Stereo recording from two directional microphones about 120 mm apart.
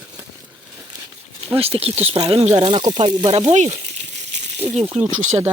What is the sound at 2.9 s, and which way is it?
Speech, 50° right (ahead or behind).